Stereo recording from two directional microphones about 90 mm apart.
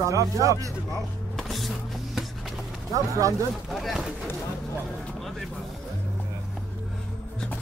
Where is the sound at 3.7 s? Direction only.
Centre (ahead or behind).